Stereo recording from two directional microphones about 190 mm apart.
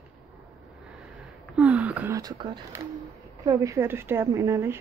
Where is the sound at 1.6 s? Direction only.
5° right (ahead or behind).